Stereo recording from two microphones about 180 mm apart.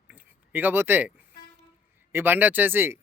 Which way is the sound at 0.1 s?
10° right (ahead or behind).